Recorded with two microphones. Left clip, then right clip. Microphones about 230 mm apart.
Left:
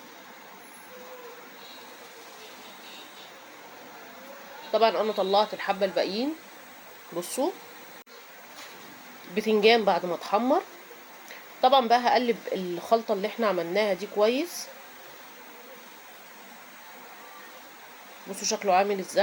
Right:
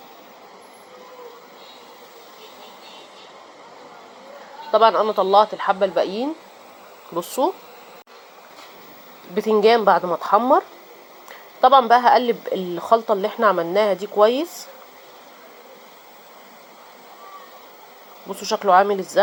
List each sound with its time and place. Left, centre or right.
4.7 s speech: centre
9.3 s speech: centre
11.6 s speech: centre
18.3 s speech: centre